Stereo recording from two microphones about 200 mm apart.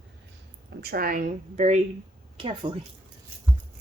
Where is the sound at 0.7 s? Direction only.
50° right (ahead or behind).